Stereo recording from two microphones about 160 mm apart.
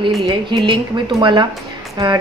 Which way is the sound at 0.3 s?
30° right (ahead or behind).